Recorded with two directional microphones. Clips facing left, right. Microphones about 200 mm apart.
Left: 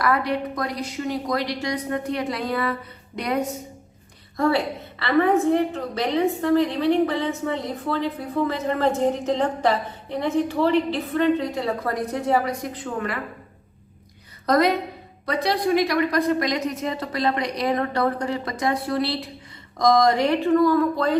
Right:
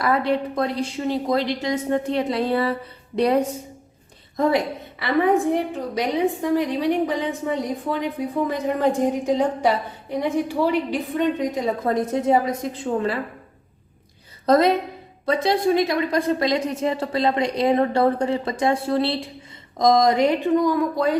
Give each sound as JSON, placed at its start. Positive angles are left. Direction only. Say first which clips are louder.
{"t": 0.0, "sound": "a woman's voice", "louder": "right 2 dB", "side_deg": -25}
{"t": 4.4, "sound": "a woman's voice", "louder": "right 1 dB", "side_deg": -20}
{"t": 14.4, "sound": "a woman's voice", "louder": "right 3 dB", "side_deg": -25}